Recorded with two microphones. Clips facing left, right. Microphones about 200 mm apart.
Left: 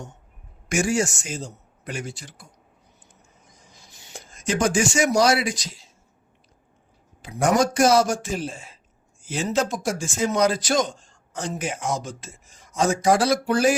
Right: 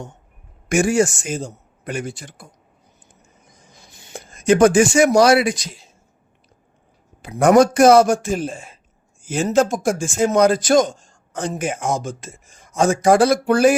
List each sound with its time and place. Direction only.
0.7 s a man's voice: 55° right (ahead or behind)
3.8 s speech: 55° right (ahead or behind)
7.2 s a man's voice: 55° right (ahead or behind)